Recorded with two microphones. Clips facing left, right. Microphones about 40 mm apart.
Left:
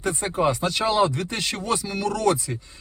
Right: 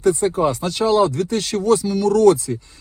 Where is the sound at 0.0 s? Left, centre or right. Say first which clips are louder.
Right 6 dB; left.